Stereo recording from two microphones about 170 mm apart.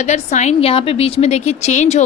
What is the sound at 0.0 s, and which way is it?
A woman's voice, 45° left (ahead or behind).